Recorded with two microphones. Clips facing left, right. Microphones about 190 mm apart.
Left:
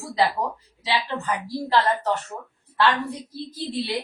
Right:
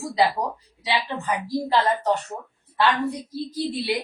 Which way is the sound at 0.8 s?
15° right (ahead or behind).